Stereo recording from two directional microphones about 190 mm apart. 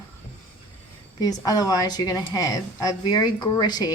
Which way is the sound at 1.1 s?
20° left (ahead or behind).